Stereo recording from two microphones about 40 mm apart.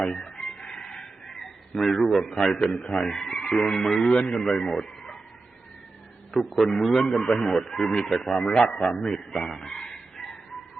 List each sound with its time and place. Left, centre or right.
0.0 s chicken: centre
0.7 s fowl: centre
2.4 s speech: centre
4.1 s speech: left
4.4 s a man's voice: centre
6.3 s a man's voice: centre